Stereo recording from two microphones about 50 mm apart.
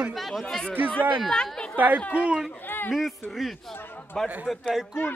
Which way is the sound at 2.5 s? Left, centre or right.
Left.